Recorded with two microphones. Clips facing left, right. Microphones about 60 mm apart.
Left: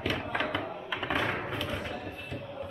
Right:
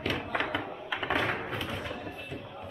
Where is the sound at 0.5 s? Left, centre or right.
Centre.